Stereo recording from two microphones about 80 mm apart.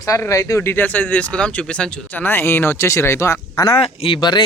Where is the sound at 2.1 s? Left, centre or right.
Left.